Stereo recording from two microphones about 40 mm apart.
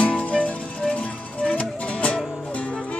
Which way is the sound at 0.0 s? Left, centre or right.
Left.